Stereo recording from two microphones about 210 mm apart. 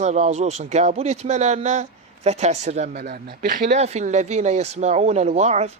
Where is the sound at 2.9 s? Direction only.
50° right (ahead or behind).